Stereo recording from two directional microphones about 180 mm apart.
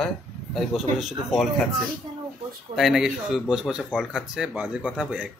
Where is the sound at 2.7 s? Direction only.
5° right (ahead or behind).